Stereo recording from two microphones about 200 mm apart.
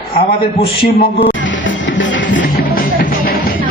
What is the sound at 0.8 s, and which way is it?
Music, 50° left (ahead or behind).